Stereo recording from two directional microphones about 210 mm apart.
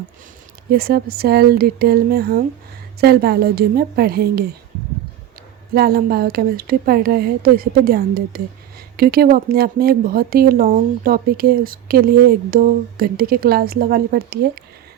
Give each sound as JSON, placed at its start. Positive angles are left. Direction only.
{"t": 0.7, "sound": "speech", "side_deg": -45}
{"t": 5.7, "sound": "speech", "side_deg": -45}